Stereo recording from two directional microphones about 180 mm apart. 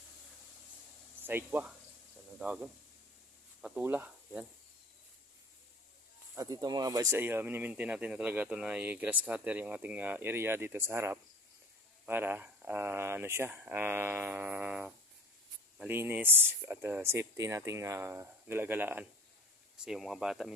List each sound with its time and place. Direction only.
1.2 s speech: 10° right (ahead or behind)
6.3 s speech: 20° right (ahead or behind); by 20.5 s centre (ahead or behind)